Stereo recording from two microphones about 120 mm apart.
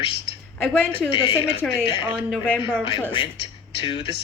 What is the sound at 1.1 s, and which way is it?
Music, 45° left (ahead or behind).